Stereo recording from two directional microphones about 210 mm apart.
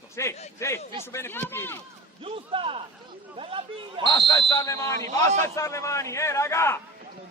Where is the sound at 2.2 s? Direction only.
25° right (ahead or behind).